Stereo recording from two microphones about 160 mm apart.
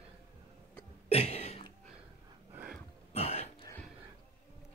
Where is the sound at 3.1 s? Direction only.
40° left (ahead or behind).